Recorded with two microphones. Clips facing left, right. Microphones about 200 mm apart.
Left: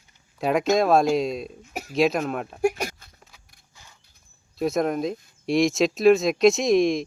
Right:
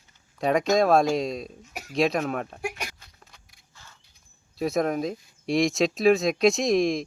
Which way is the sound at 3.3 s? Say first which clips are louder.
Even; 5° left (ahead or behind).